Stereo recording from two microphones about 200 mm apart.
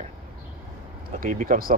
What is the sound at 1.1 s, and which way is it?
Speech, 40° right (ahead or behind).